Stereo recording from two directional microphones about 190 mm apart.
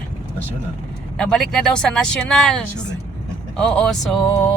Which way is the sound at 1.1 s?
5° left (ahead or behind).